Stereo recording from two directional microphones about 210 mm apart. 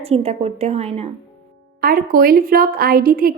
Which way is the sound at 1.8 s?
45° right (ahead or behind).